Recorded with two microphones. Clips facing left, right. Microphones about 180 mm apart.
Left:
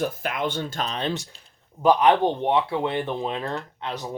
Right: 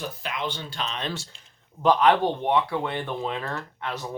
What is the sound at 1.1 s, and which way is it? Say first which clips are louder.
Speech: left 5 dB; 15° left (ahead or behind).